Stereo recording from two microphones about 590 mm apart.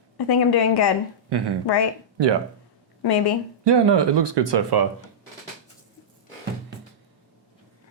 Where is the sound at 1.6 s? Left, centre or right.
Left.